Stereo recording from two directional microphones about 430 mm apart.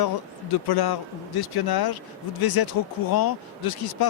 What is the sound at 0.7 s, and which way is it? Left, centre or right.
Speech, left.